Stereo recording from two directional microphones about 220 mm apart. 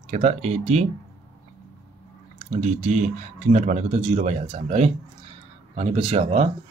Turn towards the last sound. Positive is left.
turn(degrees=-30)  # may be behind; listen again after turning